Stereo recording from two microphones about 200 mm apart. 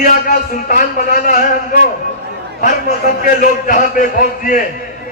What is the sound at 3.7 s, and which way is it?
Speech, 40° left (ahead or behind).